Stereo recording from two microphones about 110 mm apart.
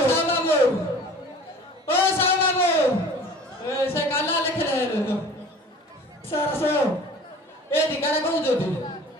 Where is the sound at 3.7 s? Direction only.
20° left (ahead or behind).